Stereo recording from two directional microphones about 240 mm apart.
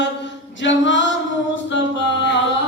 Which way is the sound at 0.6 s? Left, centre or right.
Left.